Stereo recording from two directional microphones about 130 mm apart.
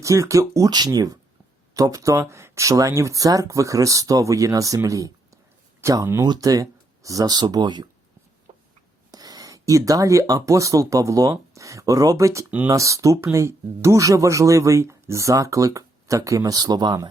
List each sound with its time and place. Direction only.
0.0 s speech: 25° right (ahead or behind)
8.5 s a sound: 55° right (ahead or behind)
9.1 s speech: 30° right (ahead or behind)
12.5 s speech: 10° right (ahead or behind)
12.7 s speech: 25° right (ahead or behind)